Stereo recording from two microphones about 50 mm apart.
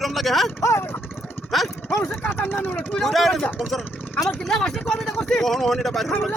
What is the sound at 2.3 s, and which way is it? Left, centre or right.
Speech, left.